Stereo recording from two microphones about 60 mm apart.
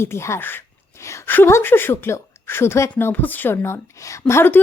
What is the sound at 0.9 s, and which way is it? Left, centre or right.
Speech, left.